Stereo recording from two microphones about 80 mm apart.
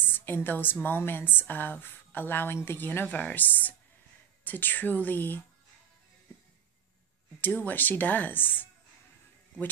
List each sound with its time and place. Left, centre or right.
0.0 s a woman's voice: left
7.3 s speech: left